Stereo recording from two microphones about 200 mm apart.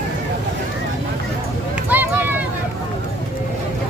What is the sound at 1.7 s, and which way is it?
Run, 10° right (ahead or behind).